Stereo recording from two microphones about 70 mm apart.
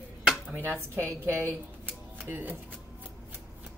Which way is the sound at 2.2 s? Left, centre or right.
Right.